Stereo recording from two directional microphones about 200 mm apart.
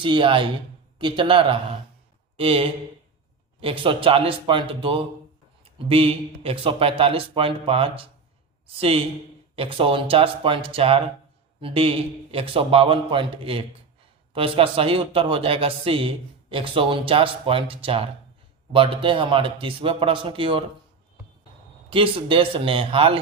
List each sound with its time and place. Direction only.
0.0 s a man's voice: 25° right (ahead or behind)
21.8 s a man's voice: 25° right (ahead or behind)